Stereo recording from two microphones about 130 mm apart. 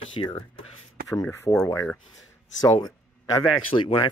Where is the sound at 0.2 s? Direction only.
35° left (ahead or behind).